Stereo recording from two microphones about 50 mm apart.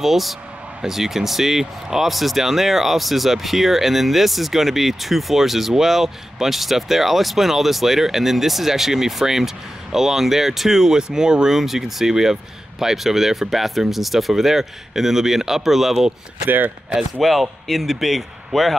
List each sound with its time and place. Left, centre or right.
0.0 s speech: centre
16.4 s speech: right
17.2 s speech: centre